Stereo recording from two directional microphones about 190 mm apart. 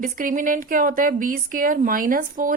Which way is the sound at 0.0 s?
45° right (ahead or behind).